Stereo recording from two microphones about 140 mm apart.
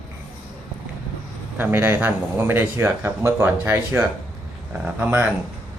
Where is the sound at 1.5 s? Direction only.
15° right (ahead or behind).